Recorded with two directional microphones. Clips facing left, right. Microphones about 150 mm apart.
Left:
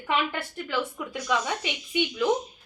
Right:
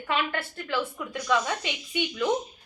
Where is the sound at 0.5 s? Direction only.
10° left (ahead or behind).